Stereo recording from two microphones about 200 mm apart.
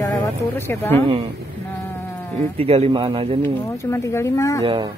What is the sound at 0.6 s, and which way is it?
Speech, 10° left (ahead or behind).